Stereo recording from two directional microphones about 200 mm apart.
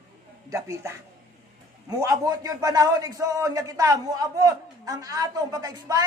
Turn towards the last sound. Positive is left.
turn(degrees=-20)  # may be behind; listen again after turning